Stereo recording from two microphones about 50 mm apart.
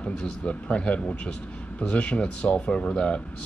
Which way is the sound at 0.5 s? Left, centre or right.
Left.